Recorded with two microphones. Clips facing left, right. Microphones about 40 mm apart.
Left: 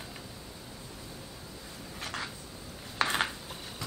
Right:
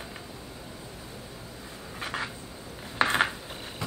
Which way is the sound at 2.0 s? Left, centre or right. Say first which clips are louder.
Right 5 dB; centre.